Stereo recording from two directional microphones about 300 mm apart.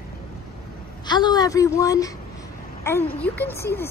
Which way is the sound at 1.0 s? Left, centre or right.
Centre.